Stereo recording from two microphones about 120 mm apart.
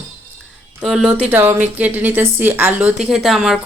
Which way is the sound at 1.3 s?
15° right (ahead or behind).